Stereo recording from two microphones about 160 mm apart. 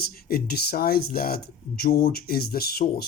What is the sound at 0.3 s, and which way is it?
Speech, 75° left (ahead or behind).